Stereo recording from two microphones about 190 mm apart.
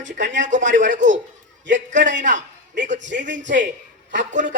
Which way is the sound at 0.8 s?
40° right (ahead or behind).